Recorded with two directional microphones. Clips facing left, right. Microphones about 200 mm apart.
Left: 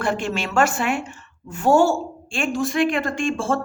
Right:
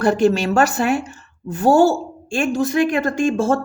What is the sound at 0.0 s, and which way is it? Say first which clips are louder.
A woman's voice: right 8 dB; 40° right (ahead or behind).